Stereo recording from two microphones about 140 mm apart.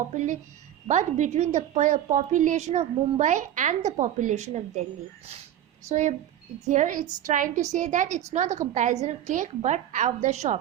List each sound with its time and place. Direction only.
0.1 s a woman's voice: 55° right (ahead or behind)
5.9 s a woman's voice: 60° right (ahead or behind)